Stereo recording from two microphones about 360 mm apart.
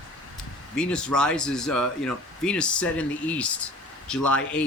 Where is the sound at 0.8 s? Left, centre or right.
Centre.